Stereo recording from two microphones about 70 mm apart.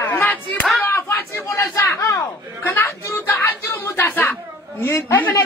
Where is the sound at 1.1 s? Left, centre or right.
Left.